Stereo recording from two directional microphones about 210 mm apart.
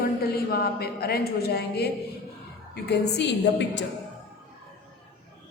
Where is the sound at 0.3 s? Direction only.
45° left (ahead or behind).